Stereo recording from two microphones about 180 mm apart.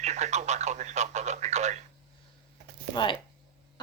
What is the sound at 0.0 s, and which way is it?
Speech, 40° right (ahead or behind).